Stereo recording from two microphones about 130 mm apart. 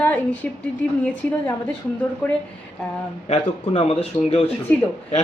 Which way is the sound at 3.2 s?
55° left (ahead or behind).